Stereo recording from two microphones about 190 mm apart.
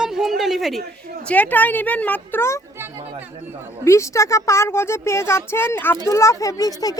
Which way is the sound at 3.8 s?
15° left (ahead or behind).